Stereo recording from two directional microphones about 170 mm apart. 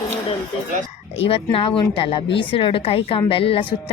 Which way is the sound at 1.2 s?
35° left (ahead or behind).